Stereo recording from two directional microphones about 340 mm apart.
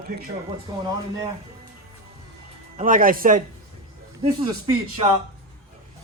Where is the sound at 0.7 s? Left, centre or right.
Centre.